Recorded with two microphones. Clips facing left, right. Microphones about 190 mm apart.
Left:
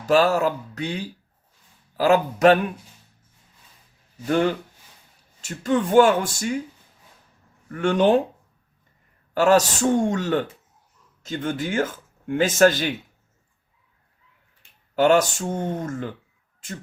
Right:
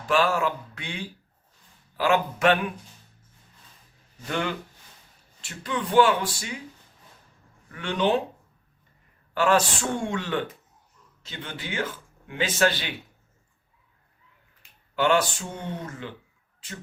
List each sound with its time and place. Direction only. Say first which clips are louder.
0.0 s a man's voice: left 5 dB; 40° left (ahead or behind)
4.3 s a man's voice: left 8 dB; 40° left (ahead or behind)
7.7 s speech: left 6 dB; 45° left (ahead or behind)
9.3 s a man's voice: left 5 dB; 40° left (ahead or behind)
14.9 s speech: left 5 dB; 40° left (ahead or behind)